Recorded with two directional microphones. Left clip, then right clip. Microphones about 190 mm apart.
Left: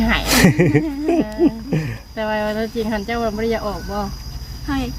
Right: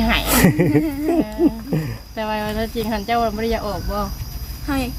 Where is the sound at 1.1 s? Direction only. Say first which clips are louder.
Left 2 dB; 15° left (ahead or behind).